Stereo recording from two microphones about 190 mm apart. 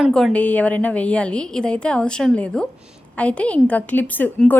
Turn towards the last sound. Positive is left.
turn(degrees=10)  # may be behind; listen again after turning